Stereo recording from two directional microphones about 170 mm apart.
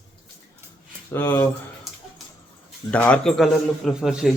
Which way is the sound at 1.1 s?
10° left (ahead or behind).